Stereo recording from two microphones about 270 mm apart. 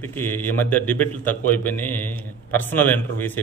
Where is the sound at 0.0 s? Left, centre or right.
Centre.